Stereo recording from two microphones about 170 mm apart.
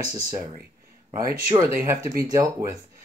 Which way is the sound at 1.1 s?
20° right (ahead or behind).